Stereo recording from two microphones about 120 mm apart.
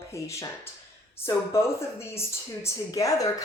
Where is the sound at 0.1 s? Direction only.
25° left (ahead or behind).